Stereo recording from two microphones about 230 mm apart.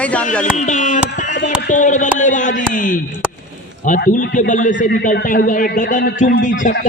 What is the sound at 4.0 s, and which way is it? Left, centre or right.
A man's voice, left.